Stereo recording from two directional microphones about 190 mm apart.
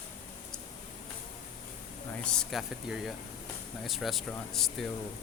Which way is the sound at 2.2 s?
5° left (ahead or behind).